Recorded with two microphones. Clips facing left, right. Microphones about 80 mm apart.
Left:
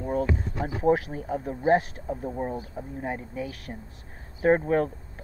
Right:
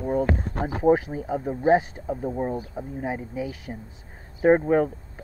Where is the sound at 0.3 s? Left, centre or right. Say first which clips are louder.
Right 3 dB; right.